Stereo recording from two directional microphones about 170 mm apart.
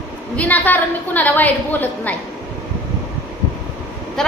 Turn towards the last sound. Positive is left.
turn(degrees=5)  # may be behind; listen again after turning